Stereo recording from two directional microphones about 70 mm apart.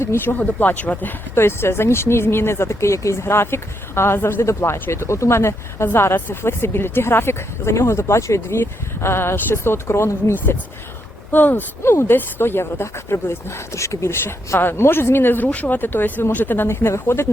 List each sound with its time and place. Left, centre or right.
0.0 s speech: left
0.3 s speech: left
1.4 s speech: left
11.3 s speech: left
11.8 s speech: left
16.6 s speech: left